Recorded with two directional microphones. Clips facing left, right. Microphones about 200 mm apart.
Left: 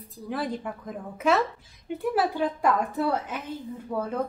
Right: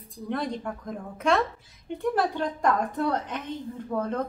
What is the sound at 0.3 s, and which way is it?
A woman's voice, 5° left (ahead or behind).